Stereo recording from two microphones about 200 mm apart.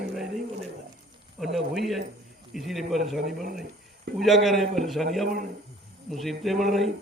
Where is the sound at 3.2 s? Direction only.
50° right (ahead or behind).